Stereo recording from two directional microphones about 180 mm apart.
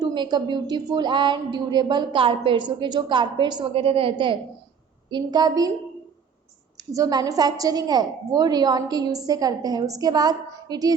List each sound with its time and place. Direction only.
0.0 s a woman's voice: 25° right (ahead or behind)
6.9 s a woman's voice: 20° right (ahead or behind)